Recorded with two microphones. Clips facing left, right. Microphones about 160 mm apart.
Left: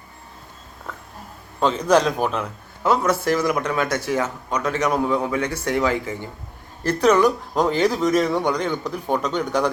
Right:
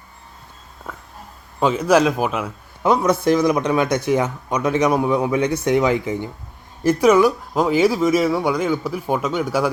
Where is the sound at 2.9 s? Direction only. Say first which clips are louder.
Right 3 dB; 20° right (ahead or behind).